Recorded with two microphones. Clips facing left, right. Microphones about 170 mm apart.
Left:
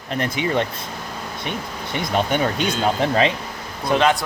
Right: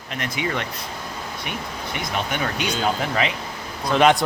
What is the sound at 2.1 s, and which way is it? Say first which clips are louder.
Speech: left 6 dB; 30° left (ahead or behind).